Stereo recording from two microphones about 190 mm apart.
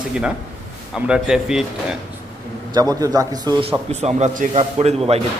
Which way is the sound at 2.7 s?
20° right (ahead or behind).